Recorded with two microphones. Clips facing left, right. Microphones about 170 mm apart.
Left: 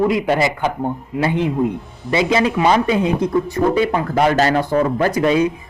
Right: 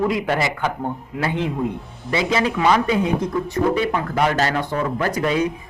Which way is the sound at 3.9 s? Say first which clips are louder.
Left 4 dB; 35° left (ahead or behind).